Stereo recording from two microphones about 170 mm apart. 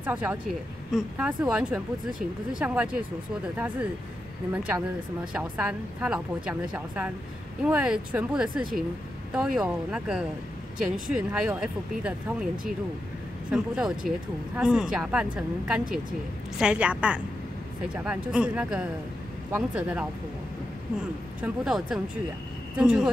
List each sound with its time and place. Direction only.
0.0 s a woman's voice: 10° right (ahead or behind)
5.3 s a woman's voice: 5° right (ahead or behind)
21.4 s speech: 5° right (ahead or behind)